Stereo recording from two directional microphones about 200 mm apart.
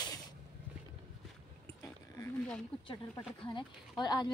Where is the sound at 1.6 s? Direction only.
15° left (ahead or behind).